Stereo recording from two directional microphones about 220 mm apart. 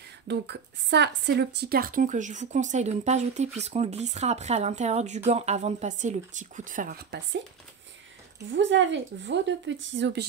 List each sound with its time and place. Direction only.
0.3 s a woman's voice: 50° right (ahead or behind)
8.5 s a woman's voice: 55° right (ahead or behind)